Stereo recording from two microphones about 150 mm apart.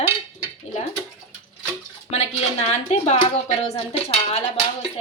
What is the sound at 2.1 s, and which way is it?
Speech, 45° left (ahead or behind).